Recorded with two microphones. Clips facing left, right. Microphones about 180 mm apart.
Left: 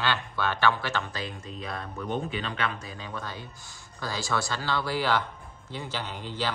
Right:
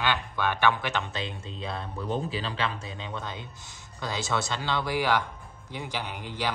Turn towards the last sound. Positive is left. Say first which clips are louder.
# even
turn(degrees=-10)  # may be behind; listen again after turning